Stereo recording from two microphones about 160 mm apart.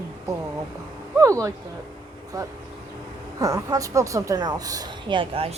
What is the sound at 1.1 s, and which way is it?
A woman's voice, 20° right (ahead or behind).